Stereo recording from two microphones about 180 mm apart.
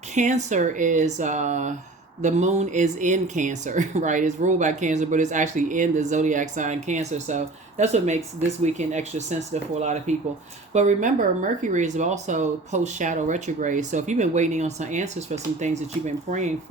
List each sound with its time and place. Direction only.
0.1 s speech: 40° right (ahead or behind)